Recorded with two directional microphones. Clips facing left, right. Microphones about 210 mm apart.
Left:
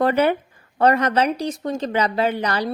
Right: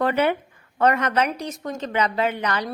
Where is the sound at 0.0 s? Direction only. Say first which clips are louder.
Left 3 dB; 40° left (ahead or behind).